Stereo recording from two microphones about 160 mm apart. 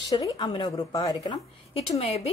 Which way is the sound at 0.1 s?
20° left (ahead or behind).